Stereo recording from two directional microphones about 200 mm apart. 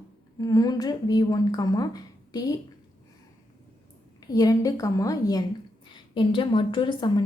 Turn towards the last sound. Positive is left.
turn(degrees=25)  # may be behind; listen again after turning